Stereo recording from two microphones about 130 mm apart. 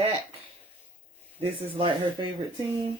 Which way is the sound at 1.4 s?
45° right (ahead or behind).